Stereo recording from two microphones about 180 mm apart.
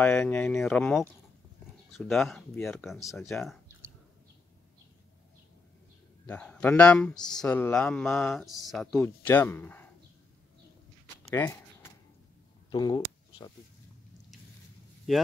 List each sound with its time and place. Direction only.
0.0 s speech: 10° left (ahead or behind)
6.2 s speech: 5° left (ahead or behind)
9.0 s speech: 10° left (ahead or behind)
11.2 s a sound: 10° left (ahead or behind)
12.7 s speech: 25° left (ahead or behind)